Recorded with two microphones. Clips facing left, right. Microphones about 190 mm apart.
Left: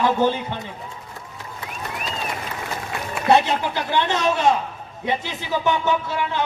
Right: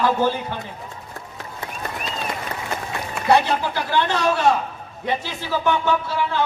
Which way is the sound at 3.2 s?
20° left (ahead or behind).